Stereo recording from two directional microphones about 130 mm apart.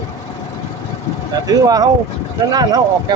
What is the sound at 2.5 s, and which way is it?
Speech, 30° right (ahead or behind).